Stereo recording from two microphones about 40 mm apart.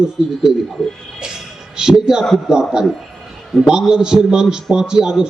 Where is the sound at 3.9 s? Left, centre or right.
Centre.